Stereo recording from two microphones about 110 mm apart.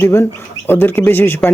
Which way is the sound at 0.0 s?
20° left (ahead or behind).